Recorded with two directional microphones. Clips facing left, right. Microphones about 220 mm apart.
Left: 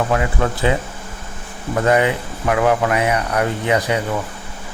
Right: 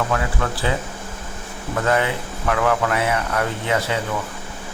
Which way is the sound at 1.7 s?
20° left (ahead or behind).